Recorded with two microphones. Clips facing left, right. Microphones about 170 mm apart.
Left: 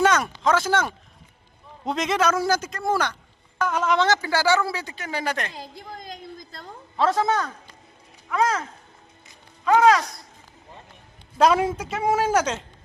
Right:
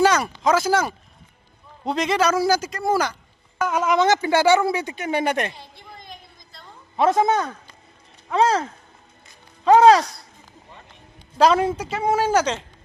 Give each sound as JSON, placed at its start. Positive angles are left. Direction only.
{"t": 0.0, "sound": "a sound", "side_deg": 0}
{"t": 0.5, "sound": "a man's voice", "side_deg": -10}
{"t": 6.9, "sound": "speech", "side_deg": -20}
{"t": 9.6, "sound": "speech", "side_deg": -30}
{"t": 11.3, "sound": "a man's voice", "side_deg": 5}